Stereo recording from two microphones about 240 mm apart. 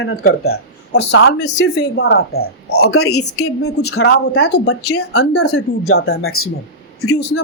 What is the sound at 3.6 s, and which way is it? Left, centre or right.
Speech, left.